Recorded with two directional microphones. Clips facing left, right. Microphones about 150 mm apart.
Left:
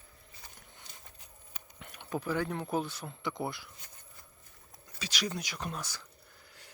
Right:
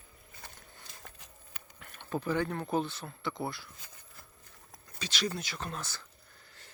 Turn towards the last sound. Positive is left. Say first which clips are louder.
# even
turn(degrees=10)  # may be behind; listen again after turning